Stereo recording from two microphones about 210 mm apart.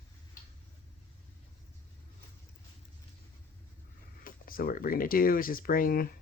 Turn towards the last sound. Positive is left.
turn(degrees=45)  # may be behind; listen again after turning